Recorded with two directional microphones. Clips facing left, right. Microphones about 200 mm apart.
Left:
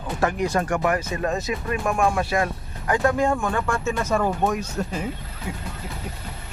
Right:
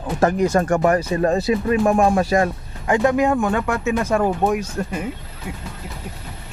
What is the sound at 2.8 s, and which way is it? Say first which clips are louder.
Speech: right 4 dB; 20° right (ahead or behind).